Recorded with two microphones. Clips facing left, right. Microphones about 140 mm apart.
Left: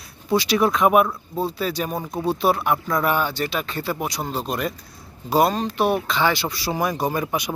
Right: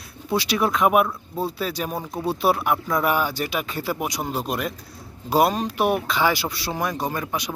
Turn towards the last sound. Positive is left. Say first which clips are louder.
# left 3 dB
turn(degrees=10)  # may be behind; listen again after turning